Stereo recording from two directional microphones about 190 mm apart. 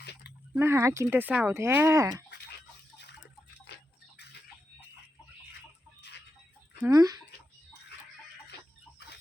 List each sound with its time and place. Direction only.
0.0 s a sound: 60° left (ahead or behind)
0.5 s speech: 15° right (ahead or behind)
6.8 s speech: 20° right (ahead or behind)